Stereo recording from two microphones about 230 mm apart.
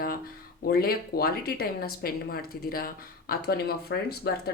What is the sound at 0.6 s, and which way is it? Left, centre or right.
Speech, left.